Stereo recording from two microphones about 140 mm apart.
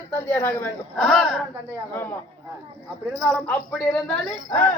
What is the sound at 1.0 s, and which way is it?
Speech, centre (ahead or behind).